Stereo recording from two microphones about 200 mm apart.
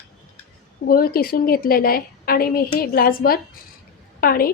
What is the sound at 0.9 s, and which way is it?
A woman's voice, 50° left (ahead or behind).